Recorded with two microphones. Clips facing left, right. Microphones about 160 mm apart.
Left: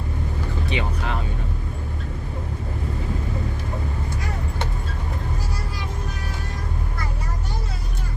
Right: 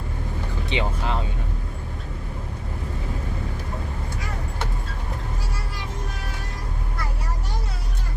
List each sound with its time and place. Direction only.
0.7 s speech: 25° right (ahead or behind)